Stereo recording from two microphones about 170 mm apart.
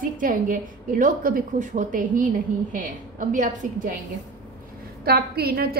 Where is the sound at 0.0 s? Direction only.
50° right (ahead or behind).